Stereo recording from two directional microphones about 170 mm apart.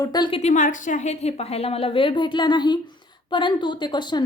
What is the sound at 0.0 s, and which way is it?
A woman's voice, 25° left (ahead or behind).